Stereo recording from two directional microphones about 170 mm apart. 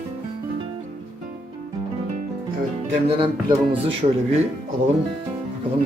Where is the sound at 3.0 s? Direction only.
30° right (ahead or behind).